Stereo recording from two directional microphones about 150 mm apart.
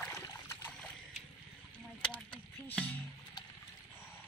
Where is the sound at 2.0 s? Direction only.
35° left (ahead or behind).